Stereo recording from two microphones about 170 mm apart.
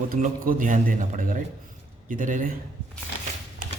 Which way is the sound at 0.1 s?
55° right (ahead or behind).